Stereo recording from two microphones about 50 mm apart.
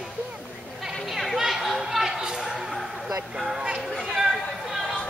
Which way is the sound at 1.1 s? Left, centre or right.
Centre.